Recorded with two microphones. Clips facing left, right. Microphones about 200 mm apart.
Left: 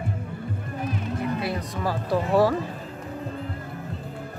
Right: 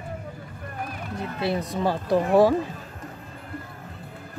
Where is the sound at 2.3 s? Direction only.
15° right (ahead or behind).